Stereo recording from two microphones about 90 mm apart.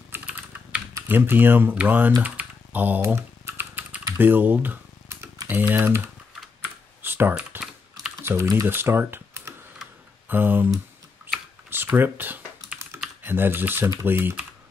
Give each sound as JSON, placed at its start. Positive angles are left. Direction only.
{"t": 0.1, "sound": "typing", "side_deg": -20}
{"t": 1.0, "sound": "speech", "side_deg": -25}
{"t": 2.2, "sound": "computer keyboard", "side_deg": -20}
{"t": 3.2, "sound": "typing", "side_deg": -30}
{"t": 5.5, "sound": "speech", "side_deg": -20}
{"t": 7.0, "sound": "typing", "side_deg": -25}
{"t": 8.2, "sound": "speech", "side_deg": -30}
{"t": 11.7, "sound": "speech", "side_deg": -25}